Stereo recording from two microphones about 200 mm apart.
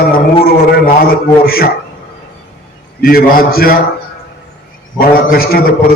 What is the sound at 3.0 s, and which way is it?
Mantra, 45° left (ahead or behind).